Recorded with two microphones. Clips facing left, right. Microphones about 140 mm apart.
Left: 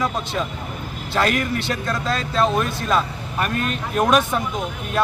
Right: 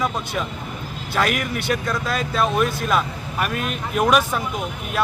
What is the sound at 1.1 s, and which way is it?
Speech, 10° right (ahead or behind).